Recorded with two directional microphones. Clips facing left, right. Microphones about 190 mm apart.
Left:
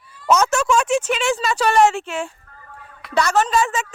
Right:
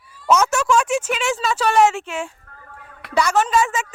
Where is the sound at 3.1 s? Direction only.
10° right (ahead or behind).